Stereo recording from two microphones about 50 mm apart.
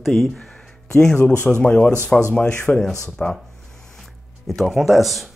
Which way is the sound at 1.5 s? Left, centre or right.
Left.